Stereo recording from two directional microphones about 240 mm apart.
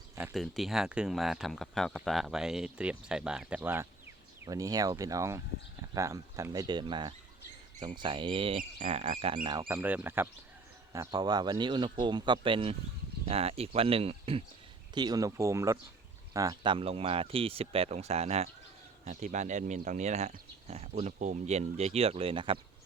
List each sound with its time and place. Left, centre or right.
0.2 s speech: centre; by 22.5 s right